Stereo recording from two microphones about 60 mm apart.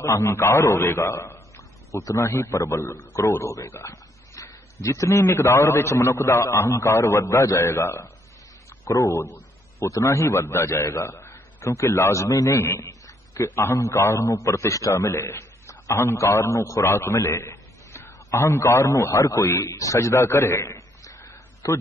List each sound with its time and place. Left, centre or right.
0.0 s a man's voice: left
3.4 s a sound: left
5.2 s a man's voice: left
8.8 s a man's voice: left
11.1 s a man's voice: left
12.5 s a sound: left
13.6 s a man's voice: left
15.1 s a man's voice: left
16.8 s a sound: left
18.4 s a man's voice: left
19.8 s a man's voice: left
21.0 s a sound: left